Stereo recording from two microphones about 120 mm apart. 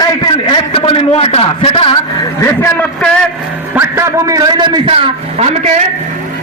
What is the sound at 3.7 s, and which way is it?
A man's voice, 20° right (ahead or behind).